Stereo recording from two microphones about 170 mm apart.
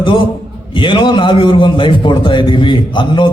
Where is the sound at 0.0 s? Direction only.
30° left (ahead or behind).